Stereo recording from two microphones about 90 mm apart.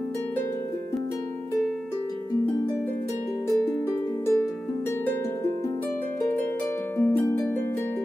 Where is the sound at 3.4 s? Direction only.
30° left (ahead or behind).